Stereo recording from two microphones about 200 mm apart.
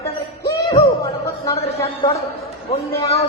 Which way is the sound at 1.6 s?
30° left (ahead or behind).